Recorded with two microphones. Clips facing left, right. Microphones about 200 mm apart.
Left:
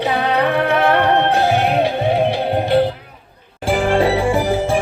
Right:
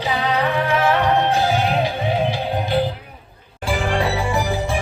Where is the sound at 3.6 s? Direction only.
50° left (ahead or behind).